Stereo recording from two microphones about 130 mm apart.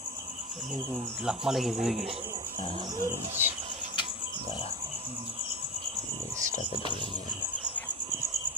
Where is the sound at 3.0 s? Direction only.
15° right (ahead or behind).